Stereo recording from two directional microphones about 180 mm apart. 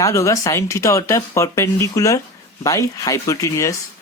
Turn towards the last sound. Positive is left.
turn(degrees=15)  # may be behind; listen again after turning